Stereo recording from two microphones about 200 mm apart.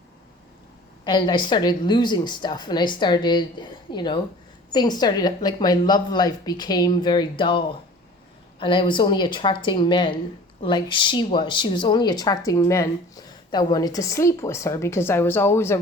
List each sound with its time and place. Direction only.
1.0 s speech: 25° left (ahead or behind)